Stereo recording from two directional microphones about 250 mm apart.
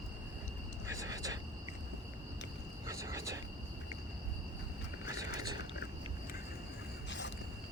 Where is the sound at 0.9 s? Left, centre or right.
Centre.